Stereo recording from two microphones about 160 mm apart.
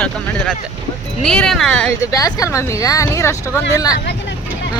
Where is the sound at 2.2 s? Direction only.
20° left (ahead or behind).